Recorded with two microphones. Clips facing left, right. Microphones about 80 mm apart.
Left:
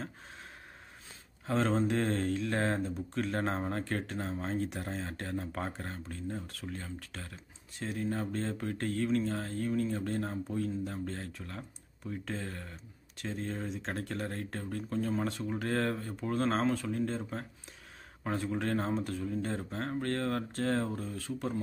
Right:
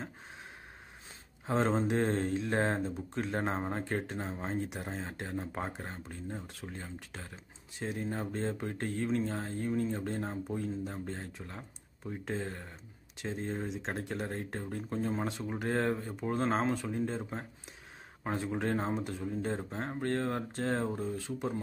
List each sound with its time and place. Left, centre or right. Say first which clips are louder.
1.4 s speech: even; right
18.2 s speech: even; right